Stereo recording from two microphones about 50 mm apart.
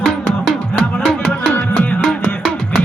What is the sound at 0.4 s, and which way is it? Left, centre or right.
Music, centre.